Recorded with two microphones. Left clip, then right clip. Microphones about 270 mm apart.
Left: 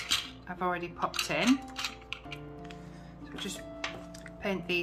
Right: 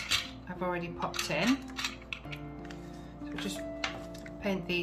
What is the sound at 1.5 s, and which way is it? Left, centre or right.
Music, left.